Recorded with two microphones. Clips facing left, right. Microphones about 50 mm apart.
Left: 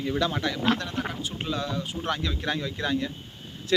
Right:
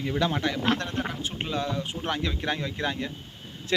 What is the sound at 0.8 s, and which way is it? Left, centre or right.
Speech, right.